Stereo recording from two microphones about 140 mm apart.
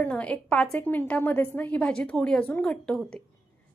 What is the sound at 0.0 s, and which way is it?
A woman's voice, 10° left (ahead or behind).